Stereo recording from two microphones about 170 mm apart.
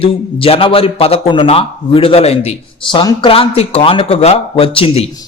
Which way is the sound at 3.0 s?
25° left (ahead or behind).